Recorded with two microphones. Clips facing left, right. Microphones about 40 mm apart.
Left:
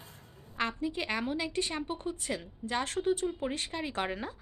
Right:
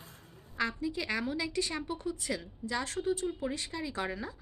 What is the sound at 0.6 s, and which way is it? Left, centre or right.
A woman's voice, left.